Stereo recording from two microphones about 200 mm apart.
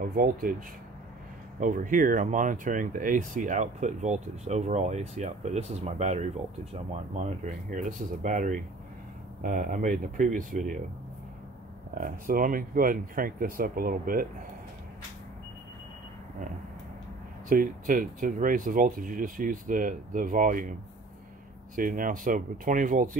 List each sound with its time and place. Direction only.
0.0 s speech: 45° right (ahead or behind)
1.6 s speech: 40° right (ahead or behind)
11.9 s speech: 45° right (ahead or behind)
17.5 s speech: 45° right (ahead or behind)
21.7 s speech: 45° right (ahead or behind)